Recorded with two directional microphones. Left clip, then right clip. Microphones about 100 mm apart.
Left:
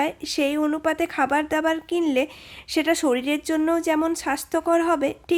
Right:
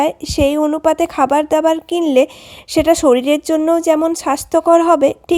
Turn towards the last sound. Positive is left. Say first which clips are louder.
# right 10 dB
turn(degrees=-60)  # may be behind; listen again after turning